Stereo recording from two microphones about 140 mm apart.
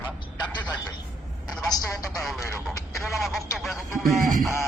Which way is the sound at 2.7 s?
20° left (ahead or behind).